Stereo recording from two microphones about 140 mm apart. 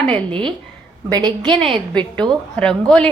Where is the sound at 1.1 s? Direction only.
30° right (ahead or behind).